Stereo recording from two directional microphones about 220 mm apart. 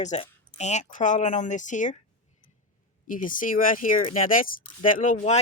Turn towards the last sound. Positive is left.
turn(degrees=30)  # may be behind; listen again after turning